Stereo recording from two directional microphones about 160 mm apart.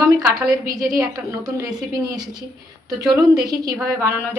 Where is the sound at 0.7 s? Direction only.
20° right (ahead or behind).